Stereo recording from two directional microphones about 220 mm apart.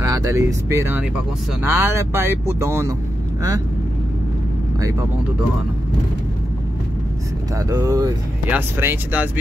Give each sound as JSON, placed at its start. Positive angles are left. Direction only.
{"t": 0.0, "sound": "speech", "side_deg": -15}
{"t": 7.5, "sound": "speech", "side_deg": -15}